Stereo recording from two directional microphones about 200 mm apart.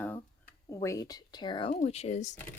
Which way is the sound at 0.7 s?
15° left (ahead or behind).